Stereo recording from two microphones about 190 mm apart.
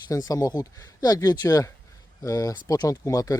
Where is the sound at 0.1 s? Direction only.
15° left (ahead or behind).